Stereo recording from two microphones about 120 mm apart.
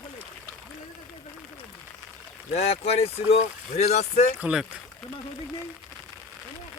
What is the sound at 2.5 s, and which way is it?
Speech, 60° left (ahead or behind).